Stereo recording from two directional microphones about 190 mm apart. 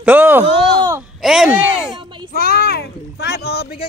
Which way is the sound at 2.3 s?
55° left (ahead or behind).